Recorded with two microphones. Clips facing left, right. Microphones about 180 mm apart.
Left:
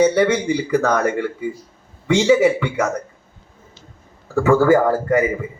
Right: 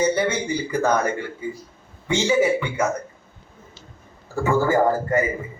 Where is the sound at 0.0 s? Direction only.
70° left (ahead or behind).